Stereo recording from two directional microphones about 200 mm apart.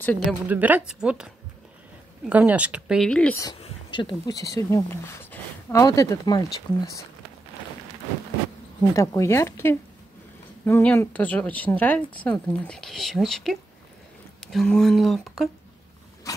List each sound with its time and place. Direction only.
0.0 s speech: 10° left (ahead or behind)
0.5 s a woman's voice: 10° right (ahead or behind)
3.6 s speech: 25° left (ahead or behind)
8.9 s speech: 15° left (ahead or behind)
16.3 s a sound: 15° left (ahead or behind)